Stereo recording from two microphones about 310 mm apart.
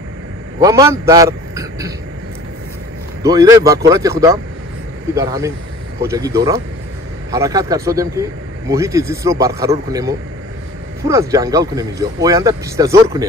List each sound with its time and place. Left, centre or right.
0.6 s a man's voice: centre
3.2 s speech: centre